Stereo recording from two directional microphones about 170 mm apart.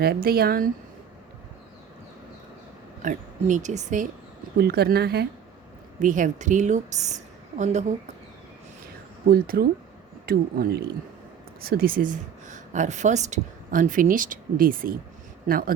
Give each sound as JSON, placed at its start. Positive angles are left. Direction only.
{"t": 0.0, "sound": "speech", "side_deg": -65}
{"t": 3.0, "sound": "a woman's voice", "side_deg": -45}
{"t": 4.5, "sound": "speech", "side_deg": -70}
{"t": 6.0, "sound": "a woman's voice", "side_deg": -50}
{"t": 9.3, "sound": "speech", "side_deg": -60}